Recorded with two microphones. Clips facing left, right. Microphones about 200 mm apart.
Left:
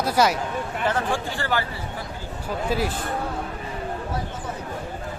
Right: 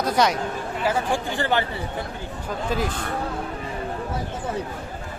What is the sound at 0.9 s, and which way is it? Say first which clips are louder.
Speech: right 2 dB; 10° right (ahead or behind).